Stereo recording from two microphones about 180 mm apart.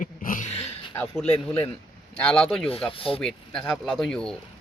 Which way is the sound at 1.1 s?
5° left (ahead or behind).